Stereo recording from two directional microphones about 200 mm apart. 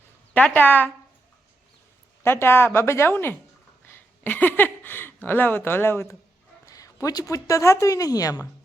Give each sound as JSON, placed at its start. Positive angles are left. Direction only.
{"t": 0.3, "sound": "a woman's voice", "side_deg": 10}
{"t": 2.2, "sound": "a woman's voice", "side_deg": 10}